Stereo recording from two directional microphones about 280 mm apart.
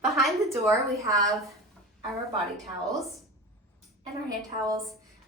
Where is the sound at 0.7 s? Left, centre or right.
Centre.